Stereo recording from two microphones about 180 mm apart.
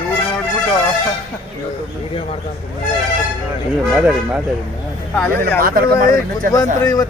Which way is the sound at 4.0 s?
5° right (ahead or behind).